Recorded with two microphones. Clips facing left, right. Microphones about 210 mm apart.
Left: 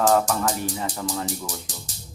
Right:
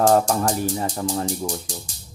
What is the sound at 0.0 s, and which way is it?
Speech, 30° right (ahead or behind).